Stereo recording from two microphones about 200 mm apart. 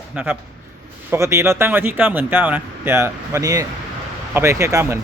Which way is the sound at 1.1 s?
15° right (ahead or behind).